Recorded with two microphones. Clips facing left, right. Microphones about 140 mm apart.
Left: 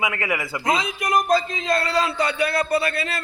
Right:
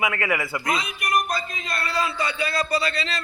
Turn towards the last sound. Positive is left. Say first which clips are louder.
# left 3 dB
turn(degrees=55)  # may be behind; listen again after turning